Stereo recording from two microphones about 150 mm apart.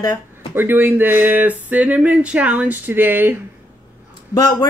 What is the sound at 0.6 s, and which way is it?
Speech, 15° right (ahead or behind).